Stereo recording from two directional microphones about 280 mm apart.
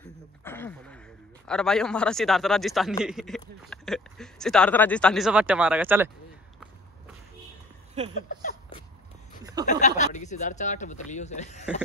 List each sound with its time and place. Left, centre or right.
0.4 s a sound: centre
1.5 s speech: centre
8.0 s speech: right
8.3 s speech: left